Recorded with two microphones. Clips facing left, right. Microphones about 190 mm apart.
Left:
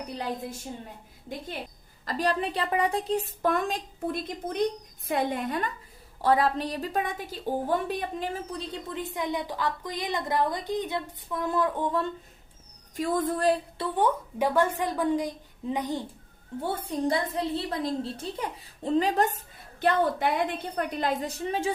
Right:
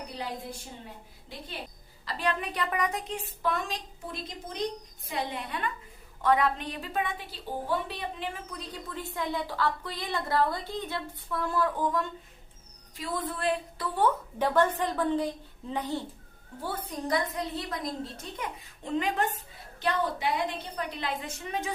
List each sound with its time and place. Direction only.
1.3 s a woman's voice: 45° left (ahead or behind); by 12.0 s 25° left (ahead or behind)
13.0 s a woman's voice: 45° left (ahead or behind)
13.7 s a woman's voice: 15° left (ahead or behind)
16.6 s a woman's voice: 25° left (ahead or behind)
19.8 s a woman's voice: 55° left (ahead or behind); by 21.7 s 30° left (ahead or behind)